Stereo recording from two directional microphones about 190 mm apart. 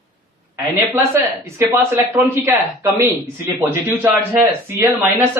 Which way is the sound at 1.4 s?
15° right (ahead or behind).